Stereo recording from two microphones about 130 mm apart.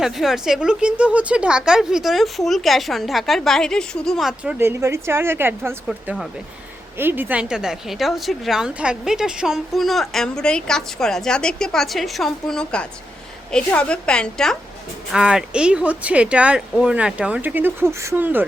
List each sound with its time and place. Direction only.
0.0 s a woman's voice: 5° right (ahead or behind)
4.5 s a woman's voice: 20° right (ahead or behind); by 14.5 s 5° left (ahead or behind)
15.1 s speech: 5° right (ahead or behind)